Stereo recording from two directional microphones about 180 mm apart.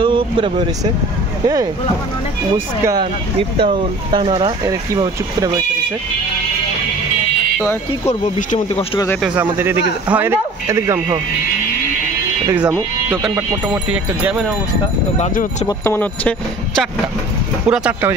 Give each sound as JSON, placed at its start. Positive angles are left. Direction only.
{"t": 0.0, "sound": "speech", "side_deg": -30}
{"t": 2.8, "sound": "speech", "side_deg": -20}
{"t": 8.1, "sound": "speech", "side_deg": 45}
{"t": 9.2, "sound": "speech", "side_deg": -10}
{"t": 12.4, "sound": "speech", "side_deg": -10}
{"t": 12.7, "sound": "speech", "side_deg": 5}
{"t": 15.1, "sound": "speech", "side_deg": 40}
{"t": 15.8, "sound": "speech", "side_deg": 10}
{"t": 17.6, "sound": "speech", "side_deg": -5}